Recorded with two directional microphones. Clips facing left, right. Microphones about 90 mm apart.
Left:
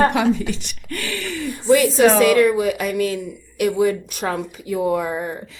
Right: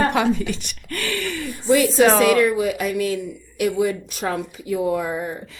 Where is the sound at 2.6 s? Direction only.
55° left (ahead or behind).